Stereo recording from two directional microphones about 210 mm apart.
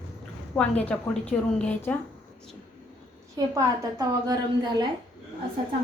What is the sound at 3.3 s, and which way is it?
A woman's voice, 20° right (ahead or behind).